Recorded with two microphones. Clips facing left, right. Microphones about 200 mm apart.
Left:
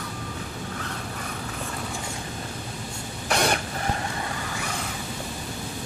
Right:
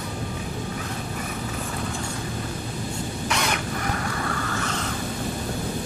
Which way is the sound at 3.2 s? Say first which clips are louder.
Left 4 dB; 35° left (ahead or behind).